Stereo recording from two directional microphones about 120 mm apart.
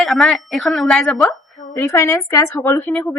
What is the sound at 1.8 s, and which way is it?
A woman's voice, 25° left (ahead or behind).